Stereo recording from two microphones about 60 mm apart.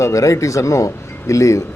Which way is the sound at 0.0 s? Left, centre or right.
Left.